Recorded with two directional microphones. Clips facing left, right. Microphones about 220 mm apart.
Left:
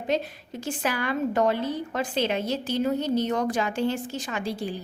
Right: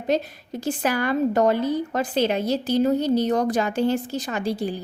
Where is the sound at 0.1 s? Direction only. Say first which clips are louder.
Right 3 dB; 40° right (ahead or behind).